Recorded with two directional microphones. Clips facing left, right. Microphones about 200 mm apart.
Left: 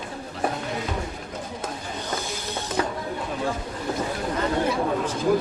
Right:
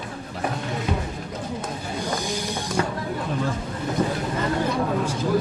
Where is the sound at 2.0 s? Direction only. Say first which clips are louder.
Right 4 dB; 10° right (ahead or behind).